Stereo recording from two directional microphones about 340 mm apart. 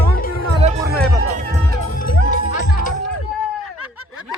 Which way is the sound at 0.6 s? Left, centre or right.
Centre.